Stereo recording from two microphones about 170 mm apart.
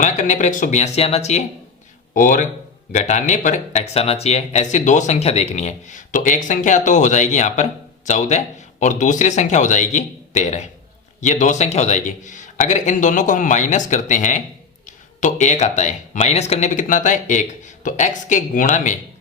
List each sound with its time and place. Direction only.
0.0 s speech: 45° left (ahead or behind)